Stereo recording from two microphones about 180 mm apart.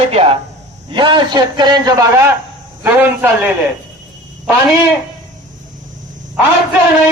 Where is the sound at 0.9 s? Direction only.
25° right (ahead or behind); by 3.5 s 10° right (ahead or behind).